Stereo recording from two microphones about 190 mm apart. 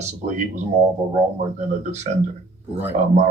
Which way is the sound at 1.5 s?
40° right (ahead or behind).